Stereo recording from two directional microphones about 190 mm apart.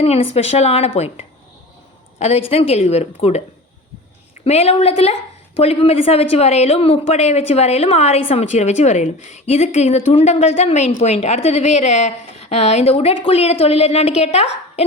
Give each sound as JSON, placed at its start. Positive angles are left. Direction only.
{"t": 0.0, "sound": "a woman's voice", "side_deg": 30}
{"t": 4.4, "sound": "a woman's voice", "side_deg": 35}